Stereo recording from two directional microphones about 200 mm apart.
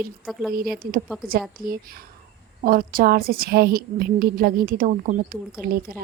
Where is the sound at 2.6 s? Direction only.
45° right (ahead or behind).